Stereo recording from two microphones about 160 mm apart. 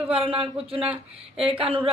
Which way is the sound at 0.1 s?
35° right (ahead or behind).